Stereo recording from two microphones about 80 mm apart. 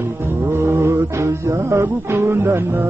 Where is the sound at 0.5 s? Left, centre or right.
Right.